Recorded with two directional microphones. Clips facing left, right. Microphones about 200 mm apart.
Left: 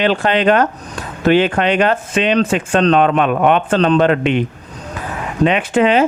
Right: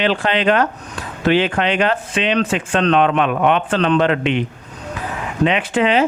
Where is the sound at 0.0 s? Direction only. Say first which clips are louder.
Left 3 dB; 45° left (ahead or behind).